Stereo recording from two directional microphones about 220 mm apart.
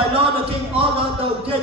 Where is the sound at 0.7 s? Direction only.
25° right (ahead or behind).